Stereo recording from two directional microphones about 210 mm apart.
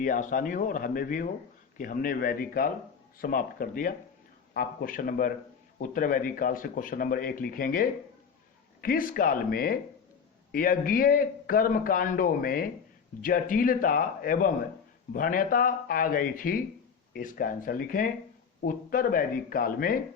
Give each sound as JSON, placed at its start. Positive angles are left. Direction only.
{"t": 0.0, "sound": "a man's voice", "side_deg": 40}